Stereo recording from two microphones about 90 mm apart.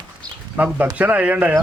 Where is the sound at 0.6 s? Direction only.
15° right (ahead or behind).